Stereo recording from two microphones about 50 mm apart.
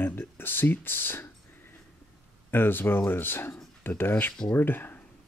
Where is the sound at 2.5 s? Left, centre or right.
Left.